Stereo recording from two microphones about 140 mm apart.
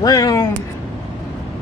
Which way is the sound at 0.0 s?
25° left (ahead or behind).